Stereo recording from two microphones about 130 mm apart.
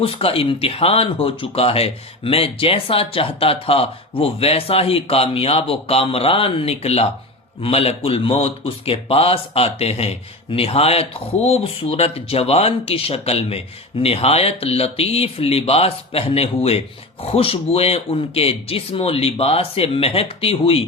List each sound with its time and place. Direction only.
0.0 s speech: 45° left (ahead or behind)